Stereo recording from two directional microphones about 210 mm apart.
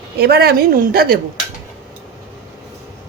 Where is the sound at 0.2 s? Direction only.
50° right (ahead or behind).